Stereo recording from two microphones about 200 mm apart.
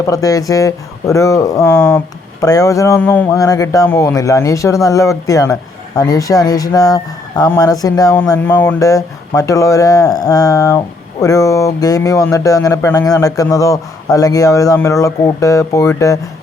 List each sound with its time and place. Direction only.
0.1 s speech: 15° left (ahead or behind)